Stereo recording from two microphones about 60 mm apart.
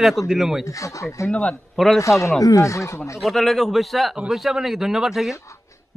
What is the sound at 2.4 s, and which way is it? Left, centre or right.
Speech, left.